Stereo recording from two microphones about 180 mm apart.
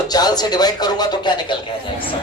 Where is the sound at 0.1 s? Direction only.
20° left (ahead or behind).